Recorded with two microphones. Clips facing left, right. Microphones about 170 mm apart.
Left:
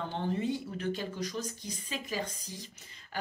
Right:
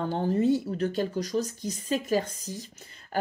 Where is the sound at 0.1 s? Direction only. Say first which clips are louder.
Right 9 dB; 40° right (ahead or behind).